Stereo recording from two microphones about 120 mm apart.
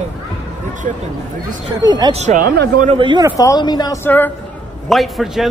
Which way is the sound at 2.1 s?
70° right (ahead or behind).